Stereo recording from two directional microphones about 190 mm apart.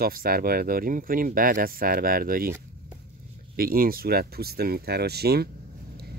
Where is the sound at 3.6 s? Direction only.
50° right (ahead or behind).